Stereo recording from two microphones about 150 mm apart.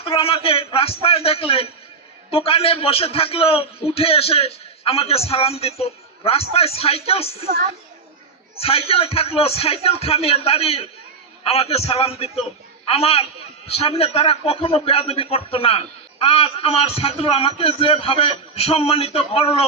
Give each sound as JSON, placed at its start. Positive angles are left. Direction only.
{"t": 0.0, "sound": "a man's voice", "side_deg": 40}
{"t": 8.6, "sound": "a man's voice", "side_deg": 40}